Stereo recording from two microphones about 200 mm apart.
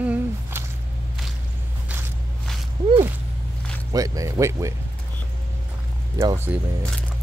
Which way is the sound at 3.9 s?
15° right (ahead or behind).